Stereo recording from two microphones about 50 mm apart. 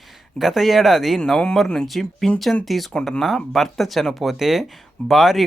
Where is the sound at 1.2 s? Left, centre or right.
Centre.